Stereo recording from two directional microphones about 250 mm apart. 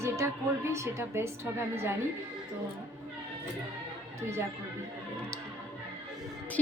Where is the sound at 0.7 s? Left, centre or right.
Centre.